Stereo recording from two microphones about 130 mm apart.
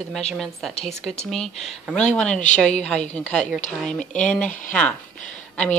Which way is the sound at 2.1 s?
5° left (ahead or behind).